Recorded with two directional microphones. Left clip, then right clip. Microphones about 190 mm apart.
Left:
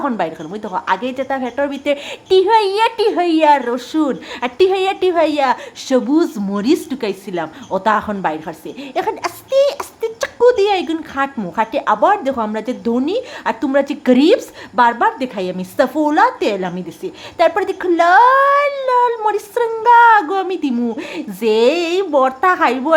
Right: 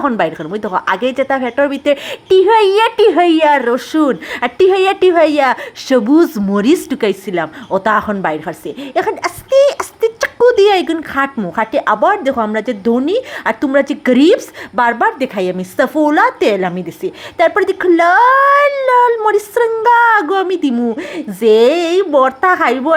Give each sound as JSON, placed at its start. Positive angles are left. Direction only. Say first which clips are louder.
{"t": 0.0, "sound": "a woman's voice", "louder": "right 5 dB", "side_deg": -20}